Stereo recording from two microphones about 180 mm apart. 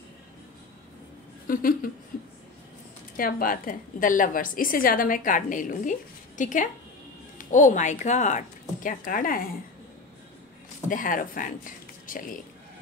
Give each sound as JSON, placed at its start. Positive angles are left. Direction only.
{"t": 1.5, "sound": "a woman's voice", "side_deg": 50}
{"t": 3.2, "sound": "a woman's voice", "side_deg": 50}
{"t": 10.9, "sound": "a woman's voice", "side_deg": 50}